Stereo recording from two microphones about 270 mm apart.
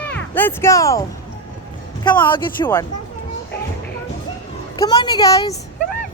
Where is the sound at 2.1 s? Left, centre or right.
Centre.